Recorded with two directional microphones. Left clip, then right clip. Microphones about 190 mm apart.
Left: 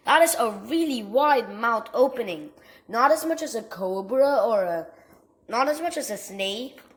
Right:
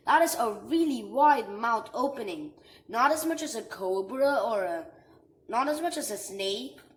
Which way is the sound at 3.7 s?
30° left (ahead or behind).